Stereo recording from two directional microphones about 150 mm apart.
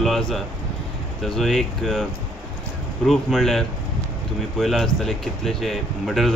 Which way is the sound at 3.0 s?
Centre (ahead or behind).